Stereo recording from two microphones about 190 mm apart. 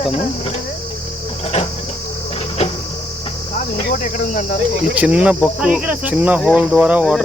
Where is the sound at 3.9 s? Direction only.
45° left (ahead or behind).